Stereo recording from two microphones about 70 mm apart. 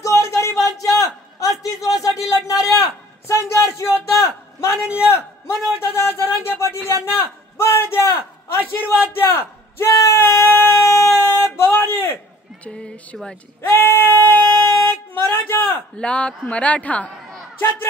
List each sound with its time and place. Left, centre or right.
0.0 s music: left
0.7 s a sound: left
3.3 s a man's voice: left
4.7 s a man's voice: centre
5.0 s a man's voice: left
12.6 s speech: centre
13.6 s a man's voice: left
16.0 s a man's voice: centre